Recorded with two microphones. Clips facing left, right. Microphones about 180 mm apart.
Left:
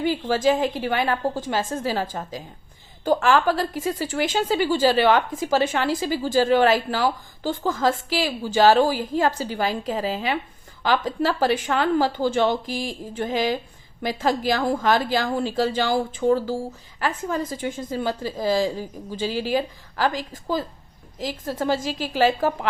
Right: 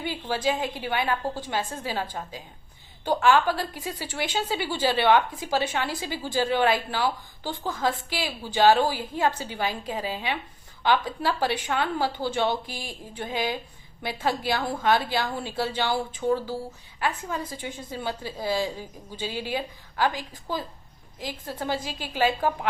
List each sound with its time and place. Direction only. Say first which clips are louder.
0.0 s a woman's voice: left 7 dB; 45° left (ahead or behind)